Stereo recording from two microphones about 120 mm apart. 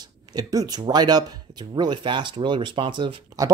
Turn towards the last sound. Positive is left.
turn(degrees=-45)  # may be behind; listen again after turning